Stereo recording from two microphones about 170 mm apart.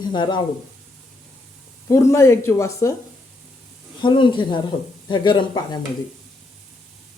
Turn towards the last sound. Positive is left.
turn(degrees=25)  # may be behind; listen again after turning